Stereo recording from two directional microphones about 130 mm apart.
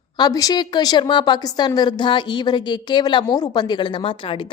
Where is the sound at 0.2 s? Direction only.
30° left (ahead or behind).